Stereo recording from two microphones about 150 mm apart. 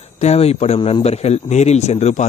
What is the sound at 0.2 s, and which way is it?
Speech, 45° left (ahead or behind).